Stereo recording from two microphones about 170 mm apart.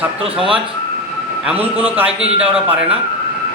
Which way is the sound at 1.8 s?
10° right (ahead or behind).